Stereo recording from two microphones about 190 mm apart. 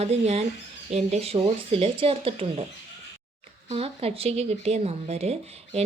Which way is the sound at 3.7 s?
30° right (ahead or behind).